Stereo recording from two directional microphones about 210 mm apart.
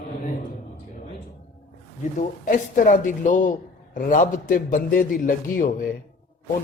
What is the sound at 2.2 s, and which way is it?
A man's voice, 40° left (ahead or behind).